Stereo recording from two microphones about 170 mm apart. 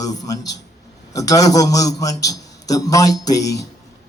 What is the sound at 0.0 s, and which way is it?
A man's voice, 20° left (ahead or behind).